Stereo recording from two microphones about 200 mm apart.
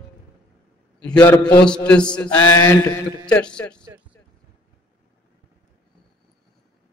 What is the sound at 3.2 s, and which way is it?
Speech, 5° left (ahead or behind).